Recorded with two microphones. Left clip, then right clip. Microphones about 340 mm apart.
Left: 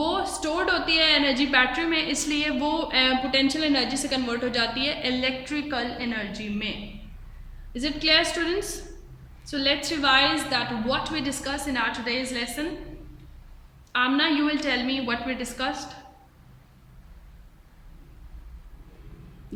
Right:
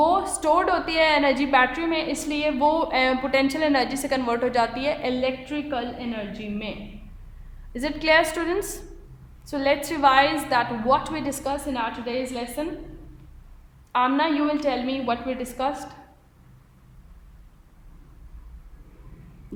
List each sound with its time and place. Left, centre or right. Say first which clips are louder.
0.0 s a woman's voice: right 6 dB; centre
13.9 s a woman's voice: right 1 dB; centre